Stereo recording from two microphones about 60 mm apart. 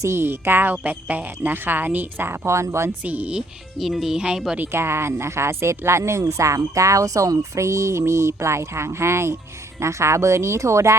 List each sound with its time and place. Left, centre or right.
0.0 s speech: right
3.0 s speech: right
3.8 s speech: centre
4.7 s speech: right